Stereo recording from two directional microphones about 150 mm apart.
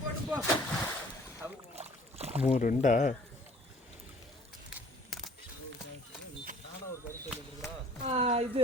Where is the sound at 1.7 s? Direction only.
45° right (ahead or behind).